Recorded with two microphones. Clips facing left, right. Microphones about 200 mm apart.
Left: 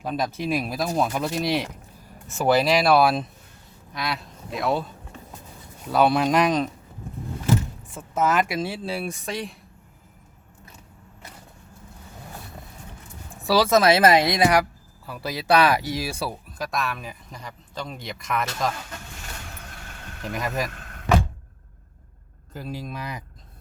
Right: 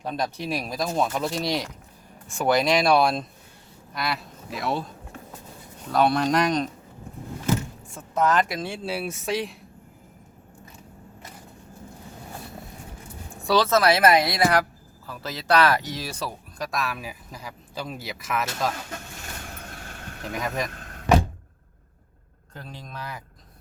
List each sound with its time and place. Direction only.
0.0 s speech: 5° left (ahead or behind)
5.9 s speech: 5° left (ahead or behind)
7.9 s speech: 5° left (ahead or behind)
13.4 s speech: 10° left (ahead or behind)
20.2 s speech: centre (ahead or behind)
22.5 s speech: 10° left (ahead or behind)